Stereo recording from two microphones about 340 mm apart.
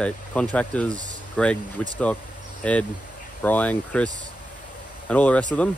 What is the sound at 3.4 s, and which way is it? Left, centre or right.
Speech, centre.